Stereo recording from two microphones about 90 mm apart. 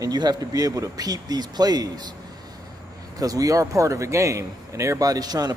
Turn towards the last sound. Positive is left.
turn(degrees=-45)  # may be behind; listen again after turning